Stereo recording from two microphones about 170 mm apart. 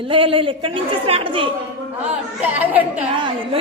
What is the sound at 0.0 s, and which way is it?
A woman's voice, 30° right (ahead or behind).